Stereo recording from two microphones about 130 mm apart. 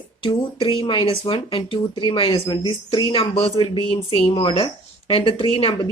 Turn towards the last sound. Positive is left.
turn(degrees=45)  # may be behind; listen again after turning